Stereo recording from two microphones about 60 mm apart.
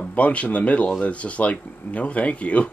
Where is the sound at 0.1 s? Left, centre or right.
Left.